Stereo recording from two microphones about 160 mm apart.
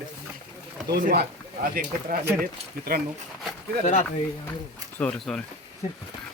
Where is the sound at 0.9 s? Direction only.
70° right (ahead or behind).